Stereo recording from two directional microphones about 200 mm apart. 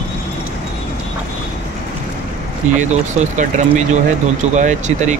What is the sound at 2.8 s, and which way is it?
Speech, 35° right (ahead or behind).